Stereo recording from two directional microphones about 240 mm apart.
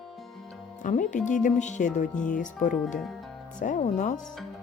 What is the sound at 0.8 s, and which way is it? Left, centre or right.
Speech, left.